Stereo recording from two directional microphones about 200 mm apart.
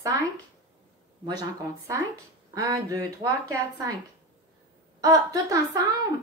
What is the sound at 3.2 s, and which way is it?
Speech, 30° right (ahead or behind).